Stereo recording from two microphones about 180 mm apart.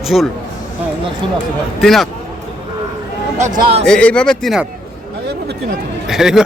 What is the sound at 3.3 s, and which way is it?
Speech, 40° right (ahead or behind).